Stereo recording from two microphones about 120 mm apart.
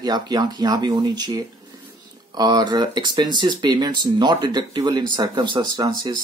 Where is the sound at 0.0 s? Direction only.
35° right (ahead or behind).